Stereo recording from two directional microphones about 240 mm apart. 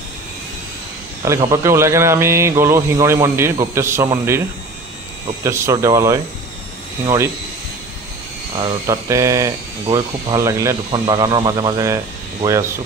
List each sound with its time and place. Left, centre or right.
1.2 s speech: centre
5.4 s speech: centre
8.5 s speech: centre